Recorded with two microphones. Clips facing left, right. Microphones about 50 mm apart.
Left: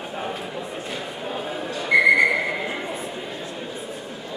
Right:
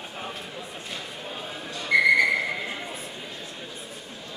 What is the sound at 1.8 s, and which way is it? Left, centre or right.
Whistle, centre.